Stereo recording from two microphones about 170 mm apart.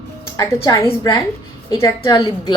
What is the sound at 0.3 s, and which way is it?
A woman's voice, 20° left (ahead or behind).